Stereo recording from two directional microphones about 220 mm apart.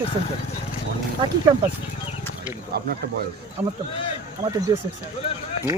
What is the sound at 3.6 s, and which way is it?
Speech, 5° right (ahead or behind).